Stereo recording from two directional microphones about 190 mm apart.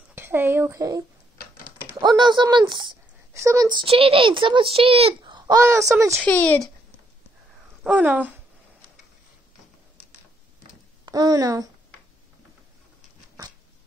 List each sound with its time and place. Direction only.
0.1 s a sound: 10° right (ahead or behind)
2.0 s speech: 25° right (ahead or behind)
6.1 s speech: 10° left (ahead or behind)
7.8 s speech: 10° right (ahead or behind)
11.1 s speech: 20° right (ahead or behind)